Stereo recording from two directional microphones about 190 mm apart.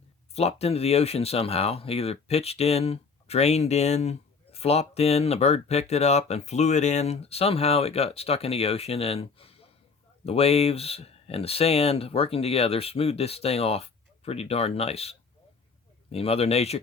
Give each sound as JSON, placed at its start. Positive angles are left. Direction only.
{"t": 0.3, "sound": "speech", "side_deg": 35}
{"t": 16.1, "sound": "speech", "side_deg": 30}